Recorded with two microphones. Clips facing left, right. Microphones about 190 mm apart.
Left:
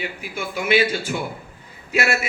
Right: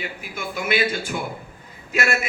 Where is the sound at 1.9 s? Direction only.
10° left (ahead or behind).